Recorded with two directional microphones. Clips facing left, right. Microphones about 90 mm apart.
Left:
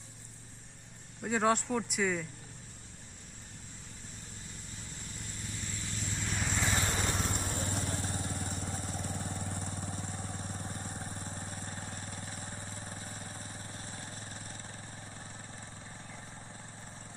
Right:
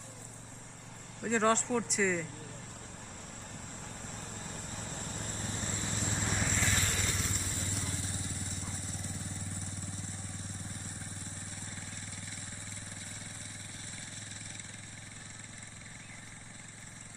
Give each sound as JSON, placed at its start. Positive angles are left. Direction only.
{"t": 1.2, "sound": "speech", "side_deg": 5}
{"t": 4.8, "sound": "vehicle", "side_deg": -50}
{"t": 5.9, "sound": "vehicle", "side_deg": -70}
{"t": 6.6, "sound": "vehicle", "side_deg": 20}
{"t": 6.8, "sound": "vehicle", "side_deg": 35}